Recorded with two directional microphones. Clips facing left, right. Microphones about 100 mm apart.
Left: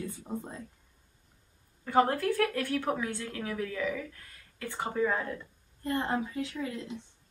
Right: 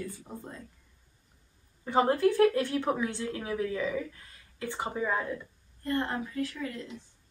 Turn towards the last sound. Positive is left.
turn(degrees=20)  # may be behind; listen again after turning